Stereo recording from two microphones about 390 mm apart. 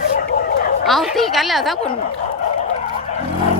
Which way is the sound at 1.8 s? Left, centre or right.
Centre.